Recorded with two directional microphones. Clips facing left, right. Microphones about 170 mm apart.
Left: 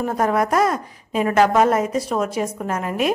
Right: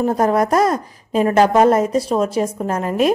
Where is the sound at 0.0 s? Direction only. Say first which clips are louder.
Right 4 dB; 35° right (ahead or behind).